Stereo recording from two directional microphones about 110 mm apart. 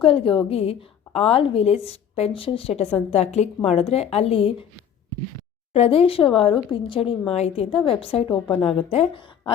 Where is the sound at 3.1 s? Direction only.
80° left; by 4.6 s 60° left (ahead or behind).